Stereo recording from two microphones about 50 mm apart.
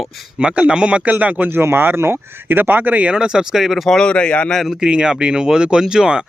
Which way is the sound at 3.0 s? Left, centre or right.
Centre.